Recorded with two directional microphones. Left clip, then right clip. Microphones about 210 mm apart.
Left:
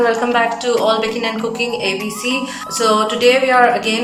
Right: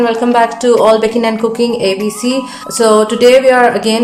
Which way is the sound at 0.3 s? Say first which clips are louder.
Right 6 dB; 30° right (ahead or behind).